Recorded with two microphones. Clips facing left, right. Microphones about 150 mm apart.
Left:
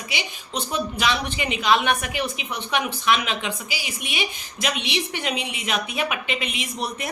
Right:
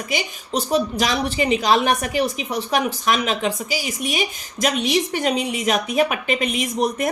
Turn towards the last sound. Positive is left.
turn(degrees=-45)  # may be behind; listen again after turning